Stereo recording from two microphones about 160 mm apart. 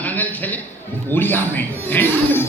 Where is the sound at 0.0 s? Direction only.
10° left (ahead or behind).